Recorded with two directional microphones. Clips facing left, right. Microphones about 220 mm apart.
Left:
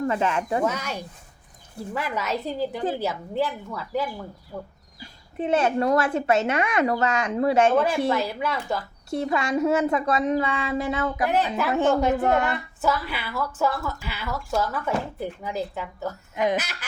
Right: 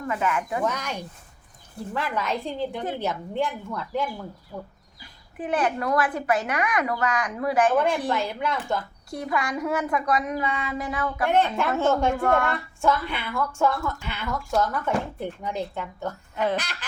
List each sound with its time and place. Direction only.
0.0 s speech: 30° left (ahead or behind)
0.6 s a woman's voice: 10° left (ahead or behind)
5.4 s speech: 25° left (ahead or behind)
7.8 s a woman's voice: 5° left (ahead or behind)
9.0 s speech: 25° left (ahead or behind)
11.3 s a woman's voice: 5° left (ahead or behind)
11.7 s a woman's voice: 15° left (ahead or behind)
12.5 s a woman's voice: 5° left (ahead or behind)
16.3 s a woman's voice: 15° left (ahead or behind)